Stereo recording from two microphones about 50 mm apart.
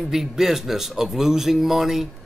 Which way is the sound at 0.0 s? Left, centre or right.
Centre.